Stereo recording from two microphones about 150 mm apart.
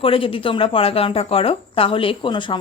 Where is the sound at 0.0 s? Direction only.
35° left (ahead or behind).